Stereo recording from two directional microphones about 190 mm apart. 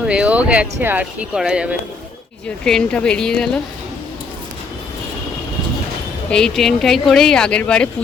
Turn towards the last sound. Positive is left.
turn(degrees=5)  # may be behind; listen again after turning